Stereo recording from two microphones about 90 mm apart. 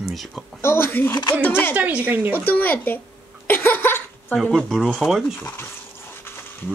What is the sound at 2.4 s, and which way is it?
Speech, 20° left (ahead or behind).